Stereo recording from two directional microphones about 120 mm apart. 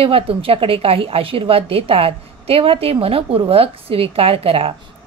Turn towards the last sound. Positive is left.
turn(degrees=-50)  # may be behind; listen again after turning